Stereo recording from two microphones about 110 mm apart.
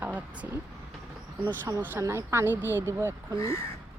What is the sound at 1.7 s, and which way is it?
A woman's voice, 25° right (ahead or behind).